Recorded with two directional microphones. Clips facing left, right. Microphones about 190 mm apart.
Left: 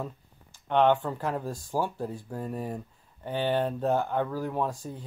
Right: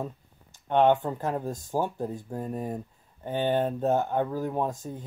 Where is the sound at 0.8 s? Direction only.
20° right (ahead or behind).